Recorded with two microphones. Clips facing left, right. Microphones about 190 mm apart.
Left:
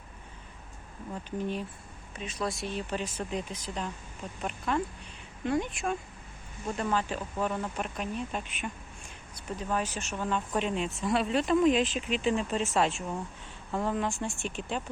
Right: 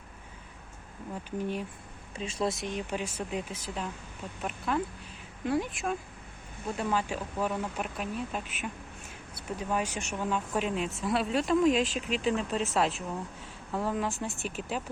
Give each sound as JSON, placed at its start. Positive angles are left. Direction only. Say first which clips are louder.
{"t": 1.4, "sound": "speech", "louder": "even", "side_deg": -10}
{"t": 2.1, "sound": "speech", "louder": "right 3 dB", "side_deg": -30}